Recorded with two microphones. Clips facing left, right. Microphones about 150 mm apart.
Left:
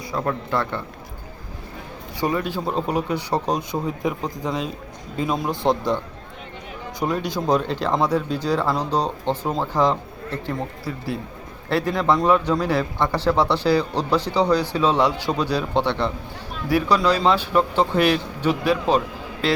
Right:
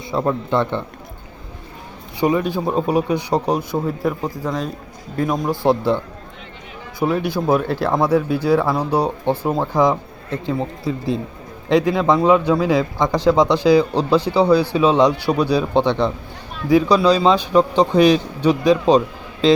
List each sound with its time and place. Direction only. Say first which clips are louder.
0.1 s a man's voice: right 5 dB; 20° right (ahead or behind)
2.2 s a man's voice: right 5 dB; 15° right (ahead or behind)
7.0 s a man's voice: right 5 dB; 10° right (ahead or behind)